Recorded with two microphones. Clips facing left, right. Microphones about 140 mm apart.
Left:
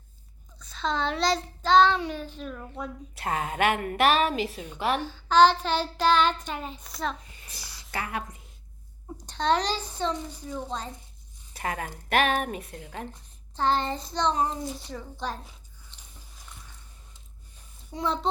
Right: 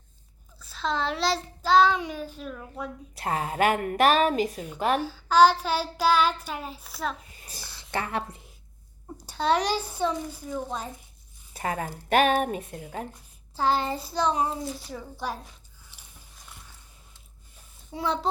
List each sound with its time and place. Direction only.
0.6 s a child's voice: 5° right (ahead or behind)
3.2 s a woman's voice: 35° right (ahead or behind)
4.9 s child singing: 10° right (ahead or behind)
7.3 s speech: 35° right (ahead or behind)
9.1 s child singing: 5° right (ahead or behind)
11.5 s a woman's voice: 35° right (ahead or behind)
13.6 s child singing: 5° right (ahead or behind)
15.9 s biting: 10° right (ahead or behind)
17.9 s a child's voice: centre (ahead or behind)